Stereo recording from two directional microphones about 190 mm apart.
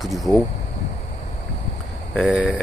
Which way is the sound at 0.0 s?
Centre (ahead or behind).